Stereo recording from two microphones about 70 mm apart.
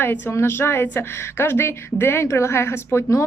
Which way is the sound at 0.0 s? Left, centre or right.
Left.